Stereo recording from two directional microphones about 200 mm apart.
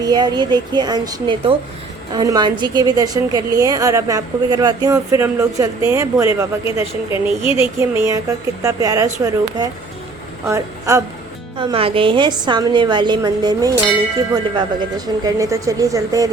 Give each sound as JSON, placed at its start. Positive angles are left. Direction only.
{"t": 0.0, "sound": "a woman's voice", "side_deg": -20}
{"t": 7.4, "sound": "a sound", "side_deg": 30}
{"t": 7.8, "sound": "a woman's voice", "side_deg": -15}
{"t": 11.5, "sound": "a woman's voice", "side_deg": -25}